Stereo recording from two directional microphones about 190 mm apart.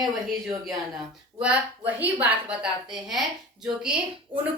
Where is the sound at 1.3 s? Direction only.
5° right (ahead or behind).